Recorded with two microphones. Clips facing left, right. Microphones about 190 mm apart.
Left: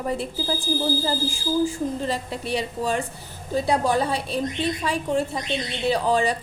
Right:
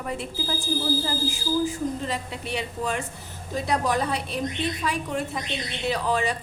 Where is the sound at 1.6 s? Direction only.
35° left (ahead or behind).